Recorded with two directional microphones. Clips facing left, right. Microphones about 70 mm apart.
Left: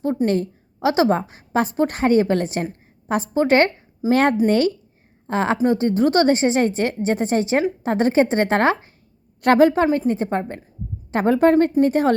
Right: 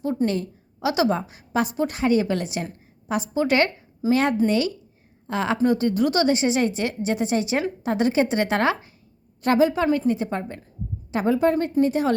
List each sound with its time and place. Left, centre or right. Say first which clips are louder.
0.3 s a woman's voice: left 5 dB; left
9.4 s a woman's voice: left 5 dB; left
11.1 s a woman's voice: left 5 dB; left